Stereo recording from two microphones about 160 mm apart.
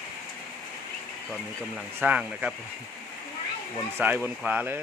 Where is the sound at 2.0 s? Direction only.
10° right (ahead or behind).